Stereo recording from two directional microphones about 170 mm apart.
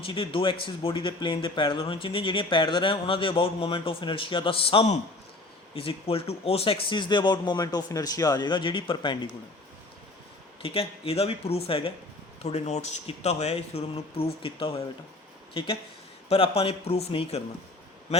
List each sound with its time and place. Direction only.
0.0 s speech: 30° left (ahead or behind)
10.6 s speech: 35° left (ahead or behind)